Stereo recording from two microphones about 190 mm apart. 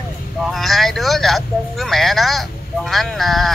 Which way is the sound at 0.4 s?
Centre (ahead or behind).